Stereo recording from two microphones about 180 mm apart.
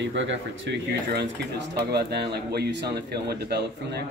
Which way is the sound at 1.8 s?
60° right (ahead or behind).